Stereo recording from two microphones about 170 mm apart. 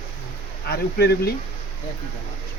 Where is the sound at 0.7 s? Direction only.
70° left (ahead or behind).